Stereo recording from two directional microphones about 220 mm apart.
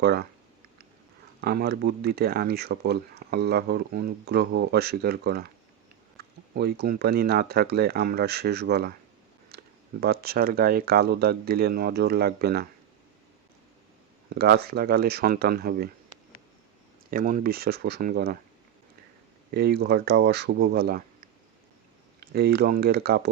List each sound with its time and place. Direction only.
0.0 s speech: 45° right (ahead or behind)
1.4 s speech: 45° right (ahead or behind)
6.5 s speech: 50° right (ahead or behind)
10.0 s speech: 45° right (ahead or behind)
14.3 s speech: 45° right (ahead or behind)
17.1 s speech: 40° right (ahead or behind)
19.5 s speech: 45° right (ahead or behind)
22.2 s speech: 45° right (ahead or behind)